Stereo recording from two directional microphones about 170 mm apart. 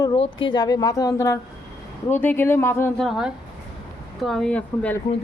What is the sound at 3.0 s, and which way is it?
Speech, centre (ahead or behind).